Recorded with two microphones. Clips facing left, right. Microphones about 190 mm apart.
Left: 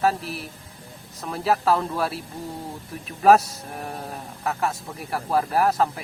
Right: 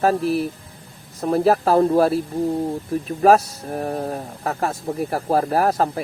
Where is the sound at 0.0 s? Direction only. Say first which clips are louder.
Right 6 dB; 45° right (ahead or behind).